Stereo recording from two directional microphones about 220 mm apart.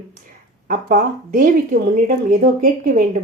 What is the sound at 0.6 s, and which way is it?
Speech, 40° right (ahead or behind).